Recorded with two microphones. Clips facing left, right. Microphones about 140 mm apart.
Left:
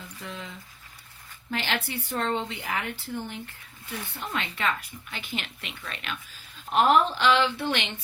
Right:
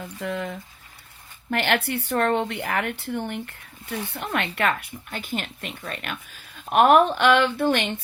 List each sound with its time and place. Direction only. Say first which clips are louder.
0.0 s a woman's voice: right 10 dB; 60° right (ahead or behind)
5.1 s speech: right 5 dB; 45° right (ahead or behind)
6.7 s a woman's voice: right 5 dB; 60° right (ahead or behind)